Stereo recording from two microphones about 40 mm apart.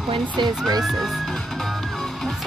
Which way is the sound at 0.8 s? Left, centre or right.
Centre.